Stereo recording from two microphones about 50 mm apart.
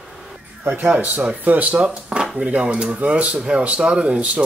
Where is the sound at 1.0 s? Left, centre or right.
Right.